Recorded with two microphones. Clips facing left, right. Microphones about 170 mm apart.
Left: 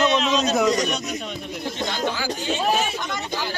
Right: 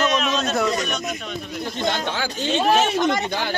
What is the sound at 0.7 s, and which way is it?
Speech, 35° left (ahead or behind).